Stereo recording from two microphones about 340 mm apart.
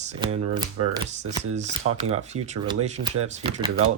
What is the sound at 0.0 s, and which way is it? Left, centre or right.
Speech, centre.